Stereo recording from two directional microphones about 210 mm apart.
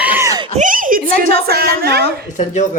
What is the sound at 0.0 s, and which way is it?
Screaming, 10° right (ahead or behind).